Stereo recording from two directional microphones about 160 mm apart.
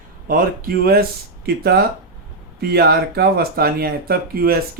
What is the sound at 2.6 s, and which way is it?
Speech, 75° right (ahead or behind).